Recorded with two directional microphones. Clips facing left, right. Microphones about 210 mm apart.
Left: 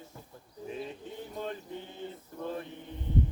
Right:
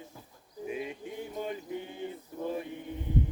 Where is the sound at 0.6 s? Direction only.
10° right (ahead or behind).